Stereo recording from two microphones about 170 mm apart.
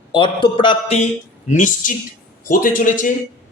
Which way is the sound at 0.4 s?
30° left (ahead or behind).